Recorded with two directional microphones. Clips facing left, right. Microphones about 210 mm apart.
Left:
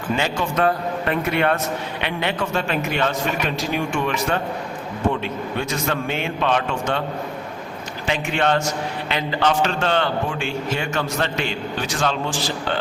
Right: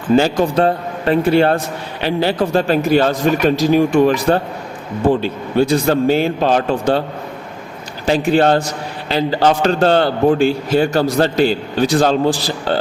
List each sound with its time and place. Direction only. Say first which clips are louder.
0.2 s a man's voice: right 7 dB; 35° right (ahead or behind)
8.0 s a man's voice: right 8 dB; 35° right (ahead or behind)